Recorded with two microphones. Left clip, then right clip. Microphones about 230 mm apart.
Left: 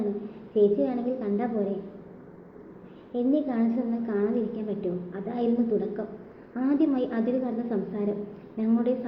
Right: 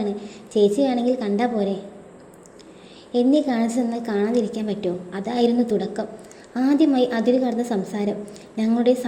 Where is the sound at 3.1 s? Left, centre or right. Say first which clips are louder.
Right 7 dB; right.